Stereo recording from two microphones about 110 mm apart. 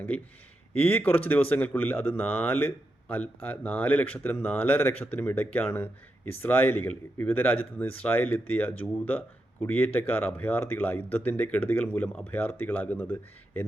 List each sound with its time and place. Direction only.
0.8 s speech: 15° left (ahead or behind)